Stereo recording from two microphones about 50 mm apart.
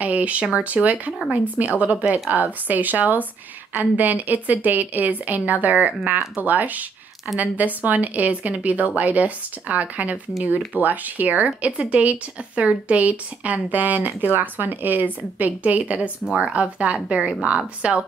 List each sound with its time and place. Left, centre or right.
0.0 s speech: right